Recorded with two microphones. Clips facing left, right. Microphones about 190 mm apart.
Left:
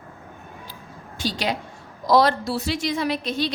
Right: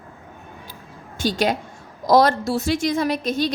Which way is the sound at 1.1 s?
50° right (ahead or behind).